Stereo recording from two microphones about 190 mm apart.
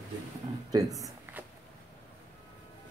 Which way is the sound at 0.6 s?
20° right (ahead or behind).